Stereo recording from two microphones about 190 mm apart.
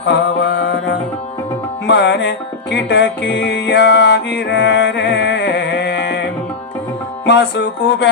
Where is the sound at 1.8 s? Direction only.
65° left (ahead or behind).